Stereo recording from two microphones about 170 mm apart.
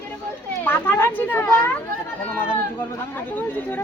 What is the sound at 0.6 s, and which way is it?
Speech, 10° left (ahead or behind).